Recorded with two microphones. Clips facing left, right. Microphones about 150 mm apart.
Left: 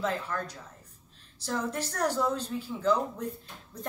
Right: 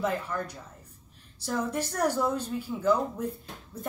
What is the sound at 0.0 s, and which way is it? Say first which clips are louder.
A woman's voice: right 2 dB; 10° right (ahead or behind).